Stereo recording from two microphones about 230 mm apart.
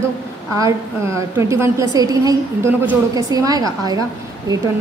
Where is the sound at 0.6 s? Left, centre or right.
Centre.